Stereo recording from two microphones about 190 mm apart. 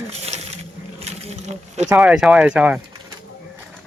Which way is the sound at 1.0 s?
35° right (ahead or behind).